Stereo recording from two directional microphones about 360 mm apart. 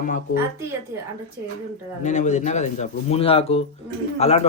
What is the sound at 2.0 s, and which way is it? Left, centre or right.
A man's voice, centre.